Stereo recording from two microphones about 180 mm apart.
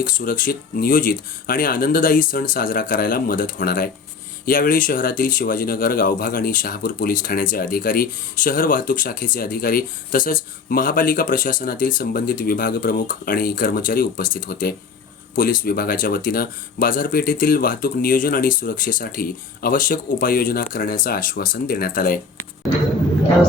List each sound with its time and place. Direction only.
0.0 s speech: 50° left (ahead or behind)